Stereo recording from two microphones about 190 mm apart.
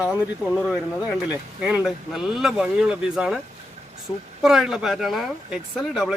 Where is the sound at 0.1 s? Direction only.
Centre (ahead or behind).